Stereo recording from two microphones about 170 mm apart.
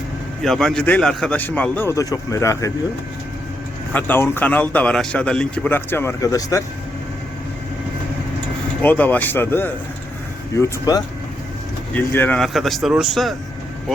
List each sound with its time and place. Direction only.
0.4 s speech: centre (ahead or behind); by 2.7 s 20° left (ahead or behind)
3.9 s speech: 10° left (ahead or behind)
8.8 s speech: 10° left (ahead or behind)